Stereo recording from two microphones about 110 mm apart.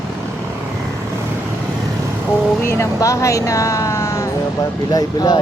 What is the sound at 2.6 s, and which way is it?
Speech, 25° left (ahead or behind).